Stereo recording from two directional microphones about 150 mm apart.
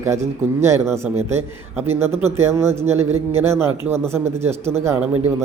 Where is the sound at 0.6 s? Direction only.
15° right (ahead or behind).